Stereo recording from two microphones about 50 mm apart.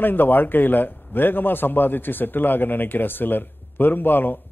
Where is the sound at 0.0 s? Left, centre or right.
Left.